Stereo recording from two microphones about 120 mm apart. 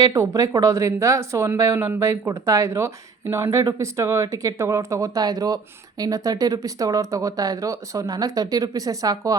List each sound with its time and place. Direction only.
0.0 s speech: 30° right (ahead or behind)